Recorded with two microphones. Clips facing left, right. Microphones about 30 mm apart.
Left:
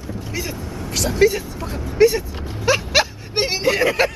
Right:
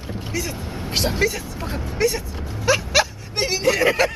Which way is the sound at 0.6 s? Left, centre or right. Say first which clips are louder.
Right 1 dB; right.